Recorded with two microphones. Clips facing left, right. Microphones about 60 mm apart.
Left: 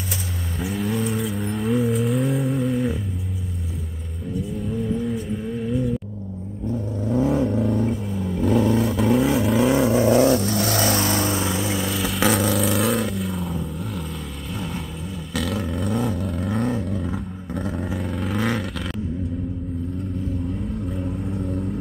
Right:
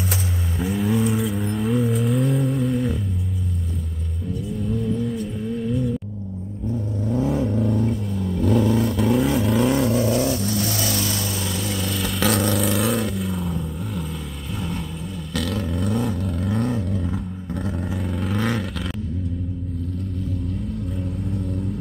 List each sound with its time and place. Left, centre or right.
0.6 s vehicle: centre
4.6 s vehicle: centre
10.0 s vehicle: left
11.3 s vehicle: centre
15.3 s vehicle: centre
21.0 s vehicle: centre